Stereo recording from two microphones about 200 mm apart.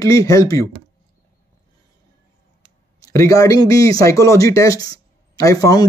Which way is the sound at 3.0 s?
15° left (ahead or behind).